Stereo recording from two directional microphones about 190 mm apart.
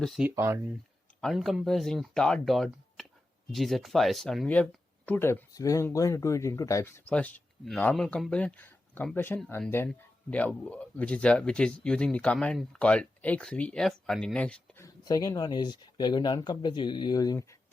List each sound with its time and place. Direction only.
0.0 s speech: 10° right (ahead or behind)
1.2 s speech: centre (ahead or behind)
14.8 s speech: 20° left (ahead or behind)